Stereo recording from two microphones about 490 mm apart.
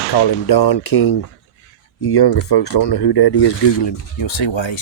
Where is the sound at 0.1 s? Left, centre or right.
Left.